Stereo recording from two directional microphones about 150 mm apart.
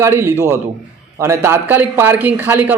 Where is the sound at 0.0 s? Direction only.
15° right (ahead or behind).